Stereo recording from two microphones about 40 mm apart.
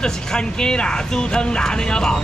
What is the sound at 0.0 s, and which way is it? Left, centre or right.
Speech, centre.